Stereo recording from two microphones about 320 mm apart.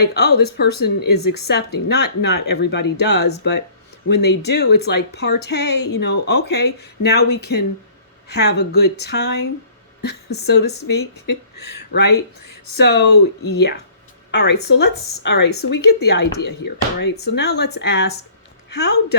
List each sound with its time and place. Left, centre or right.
0.0 s speech: left
1.0 s a woman's voice: left
1.5 s a woman's voice: left